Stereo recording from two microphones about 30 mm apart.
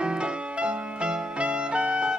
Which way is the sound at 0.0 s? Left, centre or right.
Right.